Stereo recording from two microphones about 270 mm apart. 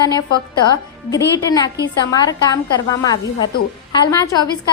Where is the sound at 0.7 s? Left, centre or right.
Centre.